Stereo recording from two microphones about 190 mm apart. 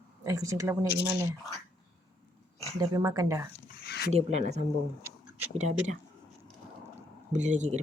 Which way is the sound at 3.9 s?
60° left (ahead or behind).